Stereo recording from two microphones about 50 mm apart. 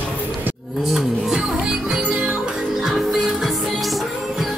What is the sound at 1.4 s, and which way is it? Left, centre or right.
Music, centre.